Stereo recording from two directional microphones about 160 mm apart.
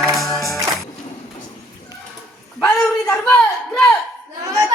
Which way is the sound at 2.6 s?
5° left (ahead or behind).